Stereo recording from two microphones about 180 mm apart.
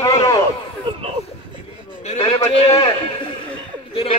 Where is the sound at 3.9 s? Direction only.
30° left (ahead or behind).